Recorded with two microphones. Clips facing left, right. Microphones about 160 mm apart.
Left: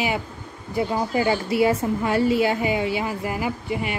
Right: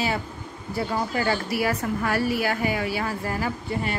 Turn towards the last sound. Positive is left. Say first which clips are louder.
# left 2 dB
turn(degrees=15)  # may be behind; listen again after turning